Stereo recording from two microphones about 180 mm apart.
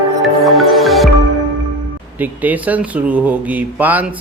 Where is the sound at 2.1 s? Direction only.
10° right (ahead or behind).